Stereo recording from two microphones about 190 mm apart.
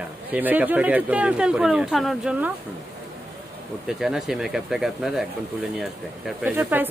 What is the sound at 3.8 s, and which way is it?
Speech, centre (ahead or behind).